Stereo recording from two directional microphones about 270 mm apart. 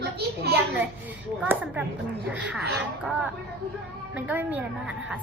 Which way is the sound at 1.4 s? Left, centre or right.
Centre.